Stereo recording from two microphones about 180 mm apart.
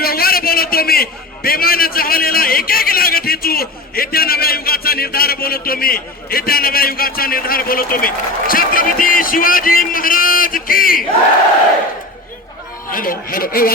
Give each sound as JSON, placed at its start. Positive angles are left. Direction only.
{"t": 0.0, "sound": "a man's voice", "side_deg": 55}
{"t": 12.9, "sound": "speech", "side_deg": 50}